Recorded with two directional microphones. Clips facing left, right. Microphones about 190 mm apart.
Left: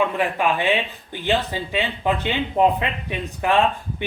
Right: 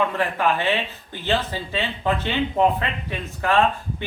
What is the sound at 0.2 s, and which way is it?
Speech, 15° left (ahead or behind).